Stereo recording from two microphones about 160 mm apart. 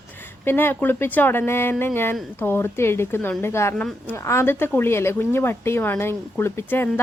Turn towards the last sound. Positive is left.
turn(degrees=15)  # may be behind; listen again after turning